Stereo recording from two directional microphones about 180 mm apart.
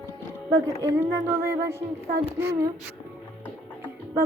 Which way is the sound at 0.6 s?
15° right (ahead or behind).